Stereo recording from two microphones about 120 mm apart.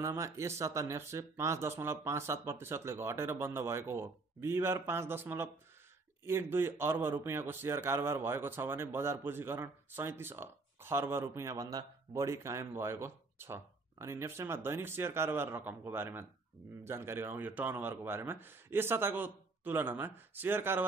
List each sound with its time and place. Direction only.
0.0 s a man's voice: 25° right (ahead or behind)